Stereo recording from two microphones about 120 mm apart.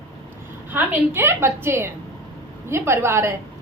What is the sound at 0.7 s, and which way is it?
A woman's voice, 15° right (ahead or behind).